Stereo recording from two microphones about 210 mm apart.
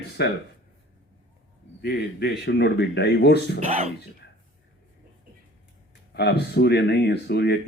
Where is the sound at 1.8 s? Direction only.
50° left (ahead or behind).